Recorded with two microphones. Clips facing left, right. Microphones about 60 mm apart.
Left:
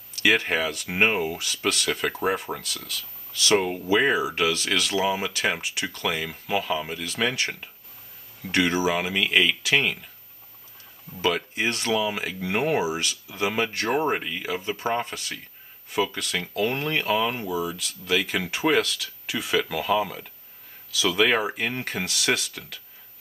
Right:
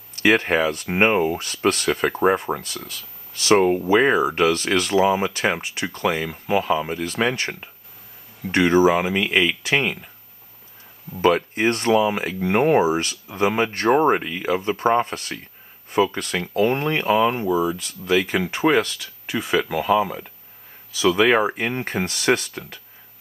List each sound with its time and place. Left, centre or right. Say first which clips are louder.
0.2 s speech: right 5 dB; right
1.9 s speech: right 7 dB; right
3.3 s speech: right 6 dB; right
4.9 s speech: right 6 dB; right
11.1 s speech: right 7 dB; right
14.1 s speech: right 6 dB; centre
14.6 s speech: right 8 dB; right
16.9 s speech: right 5 dB; centre
17.5 s speech: right 7 dB; right
18.0 s speech: right 5 dB; right
21.8 s speech: right 7 dB; right